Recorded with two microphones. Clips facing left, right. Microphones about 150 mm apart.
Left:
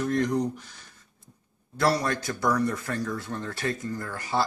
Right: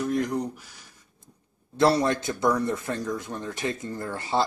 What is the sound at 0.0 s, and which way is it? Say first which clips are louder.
Speech: left 1 dB; 10° right (ahead or behind).